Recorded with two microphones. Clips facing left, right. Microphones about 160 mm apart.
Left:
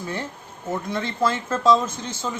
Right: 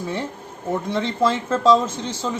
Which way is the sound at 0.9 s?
30° right (ahead or behind).